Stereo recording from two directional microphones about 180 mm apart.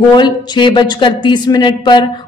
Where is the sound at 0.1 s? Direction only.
25° left (ahead or behind).